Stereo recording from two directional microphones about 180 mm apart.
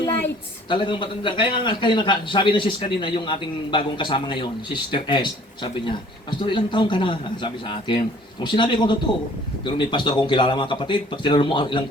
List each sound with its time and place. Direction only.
0.7 s a man's voice: 25° left (ahead or behind)